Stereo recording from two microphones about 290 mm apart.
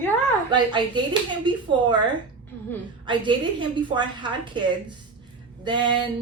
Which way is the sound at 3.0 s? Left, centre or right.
Centre.